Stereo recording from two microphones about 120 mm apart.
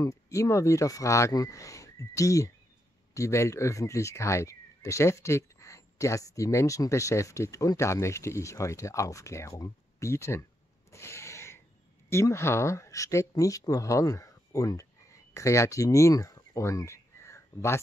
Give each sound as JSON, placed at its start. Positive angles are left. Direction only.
{"t": 0.0, "sound": "speech", "side_deg": 25}
{"t": 10.9, "sound": "a sound", "side_deg": 20}
{"t": 12.1, "sound": "speech", "side_deg": 25}